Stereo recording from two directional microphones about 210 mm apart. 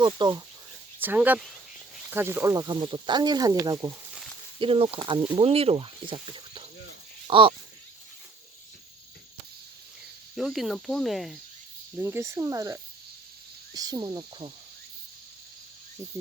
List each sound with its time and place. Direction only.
0.0 s speech: 20° right (ahead or behind)
0.9 s speech: 10° right (ahead or behind)
4.6 s speech: 25° right (ahead or behind)
10.3 s speech: centre (ahead or behind)
11.9 s speech: 10° right (ahead or behind)